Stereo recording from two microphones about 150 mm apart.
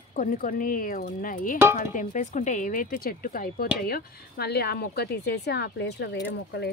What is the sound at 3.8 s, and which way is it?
A woman's voice, 90° left.